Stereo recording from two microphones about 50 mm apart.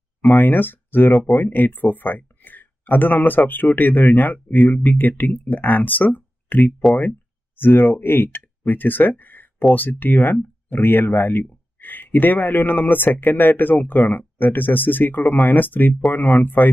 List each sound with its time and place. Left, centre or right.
0.3 s speech: left